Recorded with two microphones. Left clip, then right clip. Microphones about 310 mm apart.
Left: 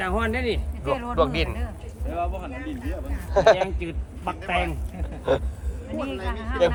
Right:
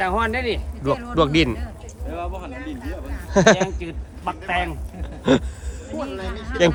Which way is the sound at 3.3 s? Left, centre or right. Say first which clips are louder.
Right 2 dB; right.